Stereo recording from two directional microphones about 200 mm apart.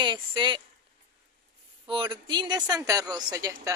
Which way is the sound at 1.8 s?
25° right (ahead or behind).